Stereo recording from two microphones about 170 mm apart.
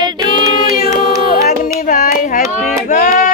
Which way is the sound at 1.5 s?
50° left (ahead or behind).